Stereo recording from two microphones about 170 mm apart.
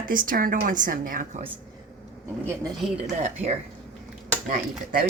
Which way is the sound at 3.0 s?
40° right (ahead or behind).